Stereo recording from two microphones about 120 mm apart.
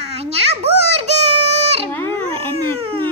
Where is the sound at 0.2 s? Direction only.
60° right (ahead or behind).